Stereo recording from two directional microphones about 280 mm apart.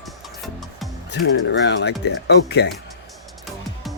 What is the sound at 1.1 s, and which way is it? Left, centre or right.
Speech, left.